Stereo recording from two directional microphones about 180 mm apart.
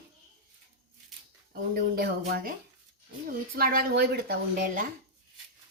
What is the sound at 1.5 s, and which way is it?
Speech, 55° right (ahead or behind).